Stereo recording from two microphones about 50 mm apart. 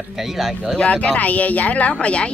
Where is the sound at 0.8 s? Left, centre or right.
Left.